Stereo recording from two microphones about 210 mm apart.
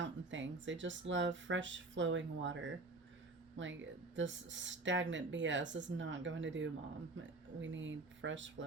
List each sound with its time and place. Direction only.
0.0 s speech: 60° right (ahead or behind)